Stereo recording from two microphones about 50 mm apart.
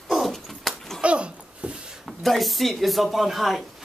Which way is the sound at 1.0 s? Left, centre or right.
Right.